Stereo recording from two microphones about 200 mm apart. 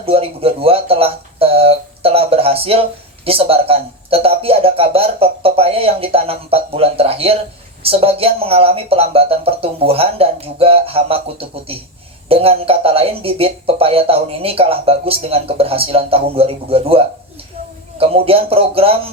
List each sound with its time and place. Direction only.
0.0 s speech: 30° right (ahead or behind)